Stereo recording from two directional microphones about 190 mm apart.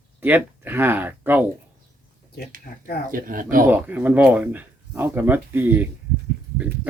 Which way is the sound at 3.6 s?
10° right (ahead or behind).